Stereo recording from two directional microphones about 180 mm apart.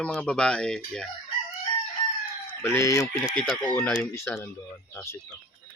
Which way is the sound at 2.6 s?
15° left (ahead or behind).